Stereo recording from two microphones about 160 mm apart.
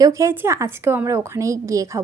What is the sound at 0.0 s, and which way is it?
Speech, 20° right (ahead or behind).